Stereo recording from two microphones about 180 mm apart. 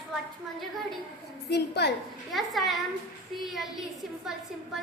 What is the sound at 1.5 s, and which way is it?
Speech, 65° left (ahead or behind).